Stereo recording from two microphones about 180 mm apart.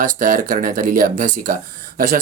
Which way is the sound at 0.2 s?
50° right (ahead or behind).